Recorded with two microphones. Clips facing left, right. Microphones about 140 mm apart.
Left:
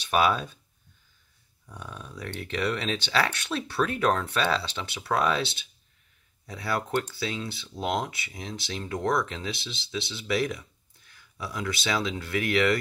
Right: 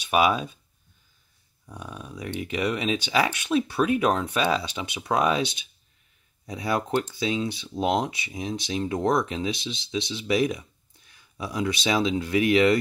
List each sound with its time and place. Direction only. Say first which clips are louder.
0.0 s speech: right 2 dB; 10° right (ahead or behind)
1.7 s speech: right 3 dB; 10° right (ahead or behind)